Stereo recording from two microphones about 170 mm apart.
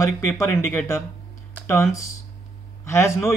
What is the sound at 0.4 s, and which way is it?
Speech, 15° left (ahead or behind).